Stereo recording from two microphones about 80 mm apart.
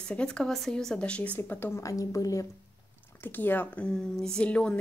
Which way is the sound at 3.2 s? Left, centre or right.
Left.